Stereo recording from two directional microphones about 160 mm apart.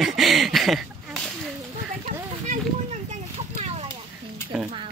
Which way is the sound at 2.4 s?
45° right (ahead or behind).